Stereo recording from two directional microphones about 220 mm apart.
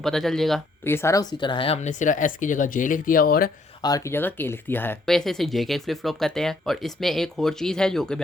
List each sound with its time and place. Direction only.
0.0 s speech: centre (ahead or behind)
0.9 s speech: 15° left (ahead or behind); by 3.5 s 40° left (ahead or behind)
3.8 s speech: 15° left (ahead or behind)